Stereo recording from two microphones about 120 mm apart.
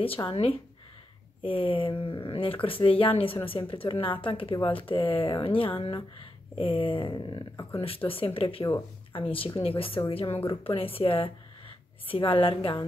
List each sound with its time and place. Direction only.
0.2 s speech: 50° left (ahead or behind)
7.8 s speech: 50° left (ahead or behind)